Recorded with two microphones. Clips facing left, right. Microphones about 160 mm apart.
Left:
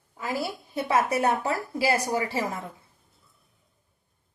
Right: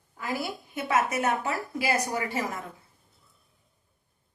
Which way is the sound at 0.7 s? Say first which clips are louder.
Left 2 dB; 30° left (ahead or behind).